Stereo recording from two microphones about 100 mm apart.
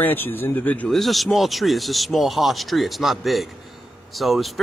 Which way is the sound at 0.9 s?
Centre (ahead or behind).